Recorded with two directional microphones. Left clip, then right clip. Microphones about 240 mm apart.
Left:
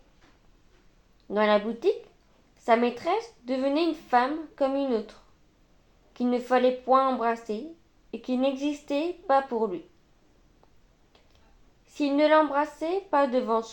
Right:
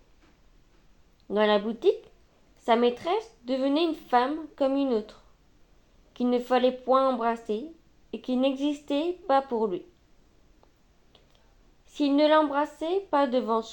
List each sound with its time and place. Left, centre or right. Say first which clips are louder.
1.3 s a woman's voice: even; right
6.1 s a woman's voice: even; right
11.9 s a woman's voice: even; right